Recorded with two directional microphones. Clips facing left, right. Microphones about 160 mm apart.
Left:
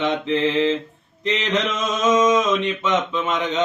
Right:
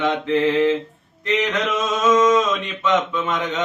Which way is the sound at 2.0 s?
20° left (ahead or behind).